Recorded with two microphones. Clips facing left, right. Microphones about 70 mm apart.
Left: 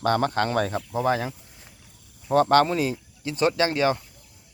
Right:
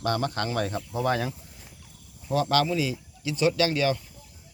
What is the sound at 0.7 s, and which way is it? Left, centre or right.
Speech, left.